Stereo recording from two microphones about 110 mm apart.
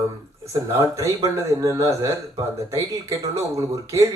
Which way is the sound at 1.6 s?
30° right (ahead or behind).